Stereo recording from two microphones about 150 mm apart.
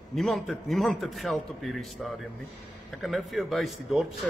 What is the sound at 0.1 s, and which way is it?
Speech, centre (ahead or behind).